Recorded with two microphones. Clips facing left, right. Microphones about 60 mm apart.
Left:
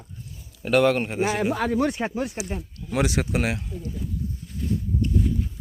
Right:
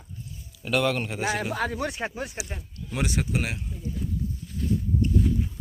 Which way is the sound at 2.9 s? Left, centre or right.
Left.